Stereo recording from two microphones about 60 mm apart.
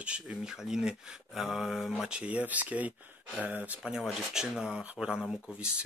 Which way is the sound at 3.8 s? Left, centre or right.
Centre.